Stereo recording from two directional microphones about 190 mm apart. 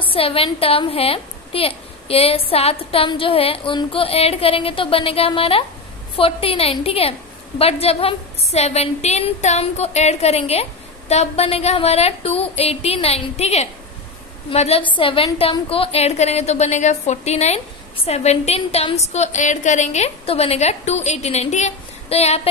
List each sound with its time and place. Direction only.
0.0 s a woman's voice: 30° left (ahead or behind)